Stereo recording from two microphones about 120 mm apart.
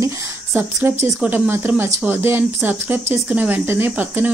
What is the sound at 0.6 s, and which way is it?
Speech, 20° right (ahead or behind).